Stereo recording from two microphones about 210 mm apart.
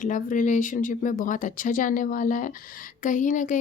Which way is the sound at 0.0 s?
40° left (ahead or behind).